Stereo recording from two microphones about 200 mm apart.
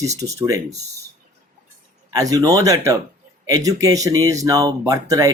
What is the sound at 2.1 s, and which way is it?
Speech, 15° right (ahead or behind).